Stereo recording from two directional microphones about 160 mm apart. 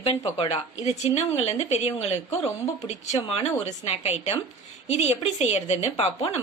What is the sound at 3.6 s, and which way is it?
A woman's voice, 45° left (ahead or behind).